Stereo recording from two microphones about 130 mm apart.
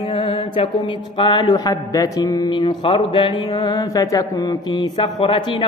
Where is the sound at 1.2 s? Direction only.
40° left (ahead or behind).